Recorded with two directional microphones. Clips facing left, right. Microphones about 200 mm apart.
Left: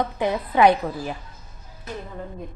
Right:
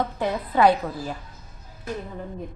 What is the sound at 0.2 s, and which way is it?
Speech, 15° left (ahead or behind).